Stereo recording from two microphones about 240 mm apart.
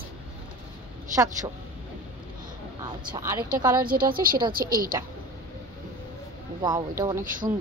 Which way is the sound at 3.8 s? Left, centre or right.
Right.